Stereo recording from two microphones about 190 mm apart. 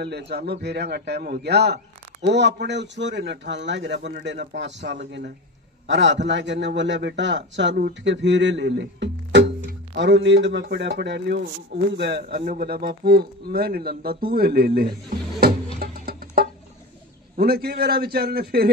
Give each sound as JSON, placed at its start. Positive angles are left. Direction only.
{"t": 0.0, "sound": "a man's voice", "side_deg": -60}
{"t": 15.8, "sound": "music", "side_deg": -55}
{"t": 17.4, "sound": "speech", "side_deg": -55}